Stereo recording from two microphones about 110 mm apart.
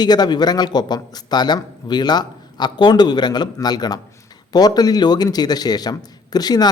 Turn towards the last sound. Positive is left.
turn(degrees=35)  # may be behind; listen again after turning